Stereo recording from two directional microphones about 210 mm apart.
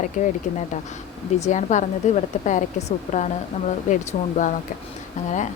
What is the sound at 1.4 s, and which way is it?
A woman's voice, 35° left (ahead or behind).